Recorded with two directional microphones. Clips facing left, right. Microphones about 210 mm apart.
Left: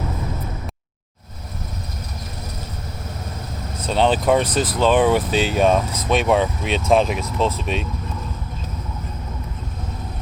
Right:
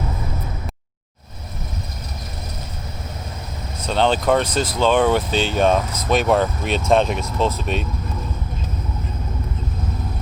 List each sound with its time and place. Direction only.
3.8 s speech: 5° left (ahead or behind)
4.4 s speech: 35° left (ahead or behind)
4.8 s speech: 5° left (ahead or behind)